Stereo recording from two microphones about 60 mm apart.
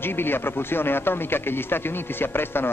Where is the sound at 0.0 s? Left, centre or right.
Left.